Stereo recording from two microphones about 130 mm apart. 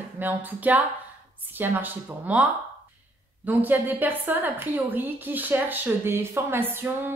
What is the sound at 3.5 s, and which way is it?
A woman's voice, 15° right (ahead or behind).